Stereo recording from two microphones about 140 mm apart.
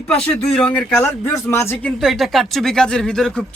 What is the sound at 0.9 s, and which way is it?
Speech, 20° left (ahead or behind).